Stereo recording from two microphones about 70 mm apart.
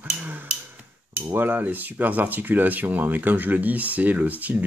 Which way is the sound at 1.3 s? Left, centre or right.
Right.